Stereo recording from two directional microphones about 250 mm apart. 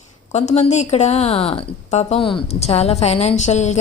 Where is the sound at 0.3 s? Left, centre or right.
Left.